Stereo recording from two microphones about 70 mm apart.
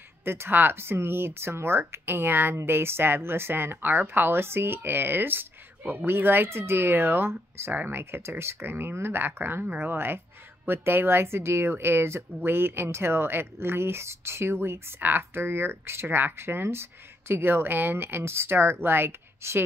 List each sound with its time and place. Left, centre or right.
0.2 s speech: right
8.0 s speech: right